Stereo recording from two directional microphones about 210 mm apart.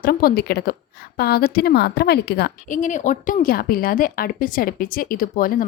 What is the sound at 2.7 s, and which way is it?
A woman's voice, 35° left (ahead or behind).